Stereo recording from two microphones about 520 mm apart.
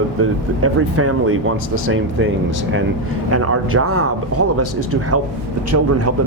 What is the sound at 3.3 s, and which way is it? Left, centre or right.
Speech, right.